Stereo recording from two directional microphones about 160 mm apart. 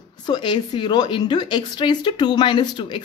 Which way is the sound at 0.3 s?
30° left (ahead or behind).